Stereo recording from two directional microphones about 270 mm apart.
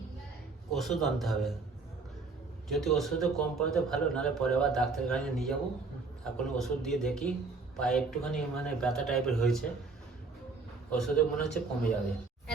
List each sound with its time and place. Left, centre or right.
0.7 s a man's voice: centre
2.6 s a man's voice: centre
10.9 s a man's voice: centre